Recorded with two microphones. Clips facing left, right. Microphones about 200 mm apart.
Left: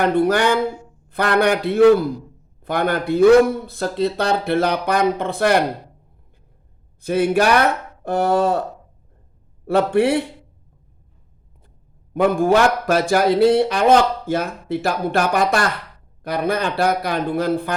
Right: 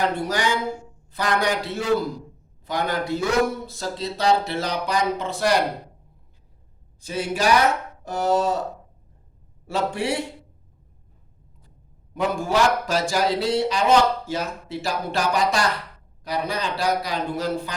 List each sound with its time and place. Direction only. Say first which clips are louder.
0.0 s speech: left 7 dB; 60° left (ahead or behind)
7.0 s speech: left 7 dB; 60° left (ahead or behind)
9.6 s speech: left 8 dB; 60° left (ahead or behind)
12.1 s speech: left 7 dB; 55° left (ahead or behind)